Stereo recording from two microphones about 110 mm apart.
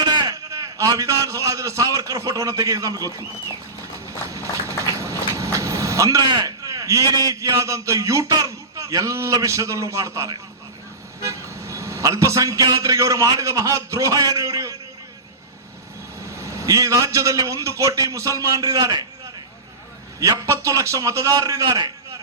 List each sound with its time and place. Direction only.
0.0 s a man's voice: 40° right (ahead or behind)
5.4 s vehicle: 30° right (ahead or behind)
6.2 s a man's voice: 40° right (ahead or behind)
14.3 s a sound: 30° right (ahead or behind)
16.3 s a man's voice: 25° right (ahead or behind)
20.1 s a man's voice: 30° right (ahead or behind)